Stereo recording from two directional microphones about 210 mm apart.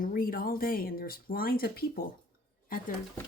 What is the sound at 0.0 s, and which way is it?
Speech, 40° left (ahead or behind).